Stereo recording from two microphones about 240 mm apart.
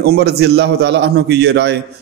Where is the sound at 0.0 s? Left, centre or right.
Right.